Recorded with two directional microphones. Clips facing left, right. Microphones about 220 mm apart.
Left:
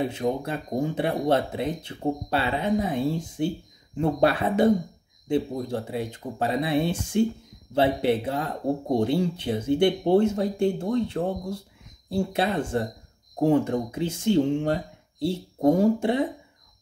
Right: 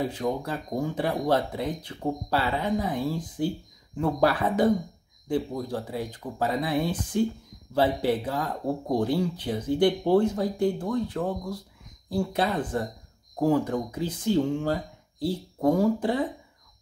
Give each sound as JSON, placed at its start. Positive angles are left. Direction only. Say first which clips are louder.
{"t": 0.0, "sound": "speech", "louder": "left 2 dB", "side_deg": 25}